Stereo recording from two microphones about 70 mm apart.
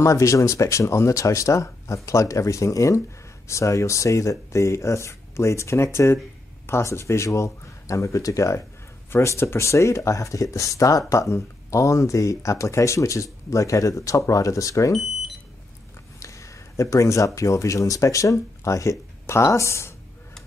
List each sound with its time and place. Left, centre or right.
0.0 s speech: left
14.9 s speech: centre
16.2 s a sound: left
17.4 s speech: left